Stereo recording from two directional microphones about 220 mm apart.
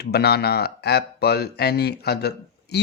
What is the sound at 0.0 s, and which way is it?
Speech, 45° left (ahead or behind).